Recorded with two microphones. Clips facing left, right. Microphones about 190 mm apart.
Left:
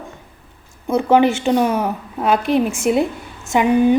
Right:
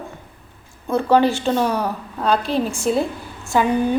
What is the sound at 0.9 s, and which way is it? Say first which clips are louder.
A woman's voice: left 2 dB; 15° left (ahead or behind).